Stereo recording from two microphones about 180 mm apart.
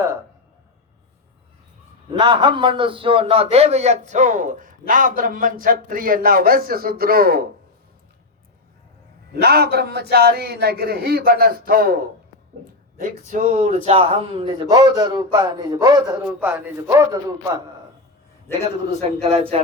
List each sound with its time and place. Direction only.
2.1 s a man's voice: 25° right (ahead or behind); by 7.4 s 55° right (ahead or behind)
9.3 s a man's voice: 60° right (ahead or behind)
13.0 s a man's voice: 45° right (ahead or behind); by 16.2 s 20° right (ahead or behind)
16.2 s a man's voice: 5° right (ahead or behind)
16.8 s a man's voice: 20° right (ahead or behind)
18.9 s speech: 35° right (ahead or behind)